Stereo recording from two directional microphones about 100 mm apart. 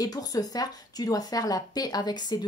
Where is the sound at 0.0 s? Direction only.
40° left (ahead or behind).